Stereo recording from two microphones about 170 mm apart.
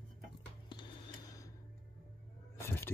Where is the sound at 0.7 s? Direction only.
25° left (ahead or behind).